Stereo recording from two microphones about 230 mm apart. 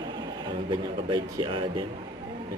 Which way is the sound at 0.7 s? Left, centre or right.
Centre.